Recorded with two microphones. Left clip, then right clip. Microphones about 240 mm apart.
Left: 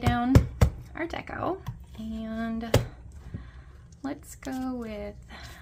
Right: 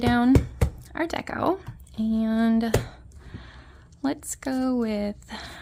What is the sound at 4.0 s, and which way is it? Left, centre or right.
Speech, right.